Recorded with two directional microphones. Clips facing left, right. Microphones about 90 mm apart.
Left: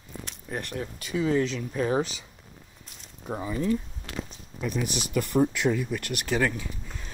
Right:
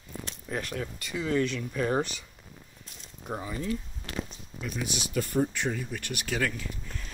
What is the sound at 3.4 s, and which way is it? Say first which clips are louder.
Speech: left 6 dB; 45° left (ahead or behind).